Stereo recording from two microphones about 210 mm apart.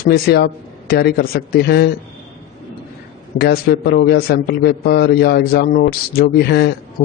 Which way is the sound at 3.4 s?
50° left (ahead or behind).